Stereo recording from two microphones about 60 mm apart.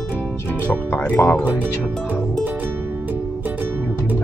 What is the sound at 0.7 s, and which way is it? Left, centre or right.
Speech, left.